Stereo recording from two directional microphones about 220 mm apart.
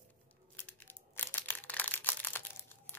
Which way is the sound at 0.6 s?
10° left (ahead or behind).